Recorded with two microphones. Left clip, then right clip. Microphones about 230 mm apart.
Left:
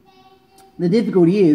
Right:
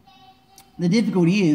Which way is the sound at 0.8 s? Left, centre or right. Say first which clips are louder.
Left 6 dB; right.